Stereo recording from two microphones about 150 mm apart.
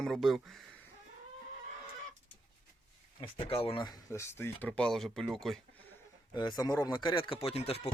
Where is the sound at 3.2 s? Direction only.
35° left (ahead or behind); by 5.6 s centre (ahead or behind).